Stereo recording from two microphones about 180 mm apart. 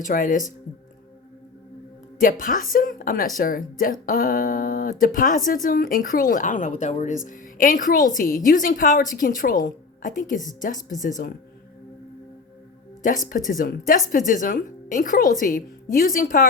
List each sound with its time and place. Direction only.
0.0 s a woman's voice: 50° left (ahead or behind)
2.1 s a woman's voice: 50° left (ahead or behind)
11.2 s speech: 55° left (ahead or behind)
13.0 s a woman's voice: 45° left (ahead or behind)